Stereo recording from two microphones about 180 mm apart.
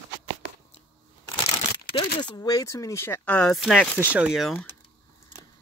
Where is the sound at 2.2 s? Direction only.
20° left (ahead or behind); by 4.5 s 5° right (ahead or behind).